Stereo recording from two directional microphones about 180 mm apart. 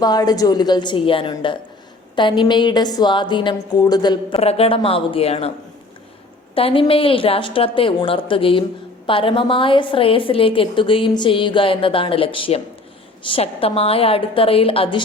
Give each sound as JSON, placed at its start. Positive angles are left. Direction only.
{"t": 0.0, "sound": "a woman's voice", "side_deg": 20}
{"t": 4.4, "sound": "a woman's voice", "side_deg": 35}
{"t": 6.5, "sound": "a woman's voice", "side_deg": 30}